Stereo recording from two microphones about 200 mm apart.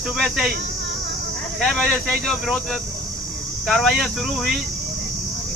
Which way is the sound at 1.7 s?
5° left (ahead or behind).